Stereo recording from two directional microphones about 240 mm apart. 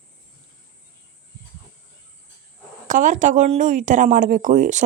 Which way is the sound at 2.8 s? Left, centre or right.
Right.